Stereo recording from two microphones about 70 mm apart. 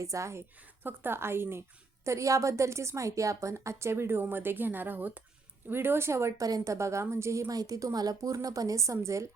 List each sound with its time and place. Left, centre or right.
0.0 s speech: right
0.6 s speech: right
2.0 s a woman's voice: right
6.4 s a woman's voice: right
6.7 s speech: right